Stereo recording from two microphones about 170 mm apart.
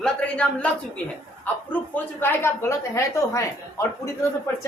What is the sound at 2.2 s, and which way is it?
A woman's voice, 15° left (ahead or behind).